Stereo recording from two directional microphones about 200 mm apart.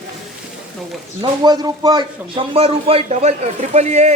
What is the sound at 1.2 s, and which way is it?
A man's voice, 20° right (ahead or behind).